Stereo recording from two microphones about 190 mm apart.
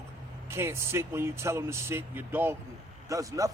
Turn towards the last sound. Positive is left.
turn(degrees=-15)  # may be behind; listen again after turning